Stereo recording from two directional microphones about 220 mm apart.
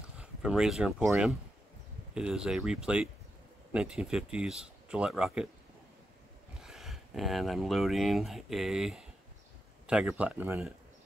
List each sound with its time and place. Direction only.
0.2 s speech: 5° right (ahead or behind)
6.6 s speech: centre (ahead or behind)